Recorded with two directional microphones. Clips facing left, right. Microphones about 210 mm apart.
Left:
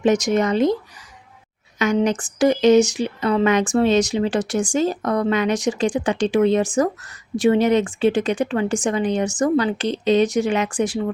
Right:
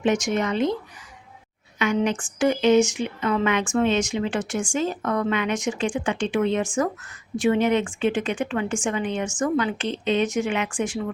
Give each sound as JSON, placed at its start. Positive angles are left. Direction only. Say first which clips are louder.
{"t": 0.0, "sound": "speech", "louder": "left 5 dB", "side_deg": 40}
{"t": 1.8, "sound": "speech", "louder": "left 4 dB", "side_deg": 40}